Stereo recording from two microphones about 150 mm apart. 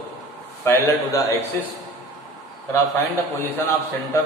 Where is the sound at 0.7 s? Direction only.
20° left (ahead or behind).